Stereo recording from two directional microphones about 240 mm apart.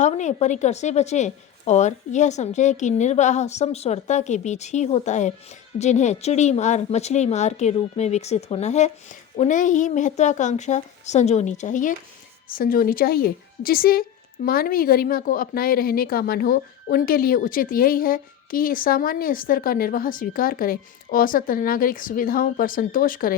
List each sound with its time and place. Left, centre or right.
0.0 s a woman's voice: left